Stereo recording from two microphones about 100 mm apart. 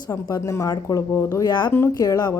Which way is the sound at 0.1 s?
35° left (ahead or behind).